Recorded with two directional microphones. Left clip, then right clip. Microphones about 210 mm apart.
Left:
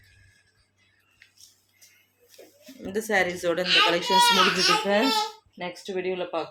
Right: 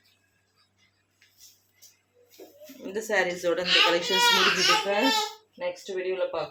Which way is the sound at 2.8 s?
40° left (ahead or behind).